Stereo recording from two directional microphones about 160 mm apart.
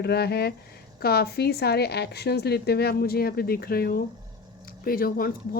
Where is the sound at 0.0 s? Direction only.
90° left.